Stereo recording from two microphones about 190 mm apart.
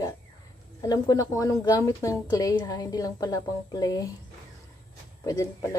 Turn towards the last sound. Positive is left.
turn(degrees=20)  # may be behind; listen again after turning